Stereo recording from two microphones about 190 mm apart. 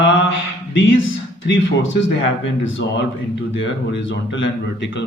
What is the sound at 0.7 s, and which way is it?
Speech, 75° left (ahead or behind).